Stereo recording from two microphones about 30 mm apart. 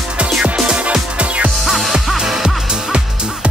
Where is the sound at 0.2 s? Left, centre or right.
Right.